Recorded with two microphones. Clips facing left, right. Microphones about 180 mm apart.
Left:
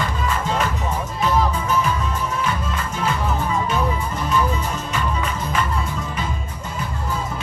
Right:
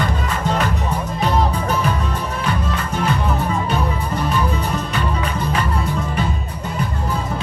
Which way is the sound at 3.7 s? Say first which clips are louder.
Right 1 dB; 65° right (ahead or behind).